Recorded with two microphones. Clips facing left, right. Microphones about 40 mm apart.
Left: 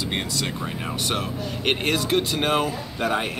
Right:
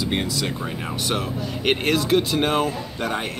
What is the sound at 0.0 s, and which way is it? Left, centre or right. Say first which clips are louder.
Speech: right 3 dB; centre.